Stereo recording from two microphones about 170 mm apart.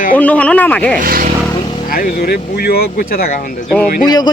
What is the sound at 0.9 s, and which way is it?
Speech, 55° right (ahead or behind).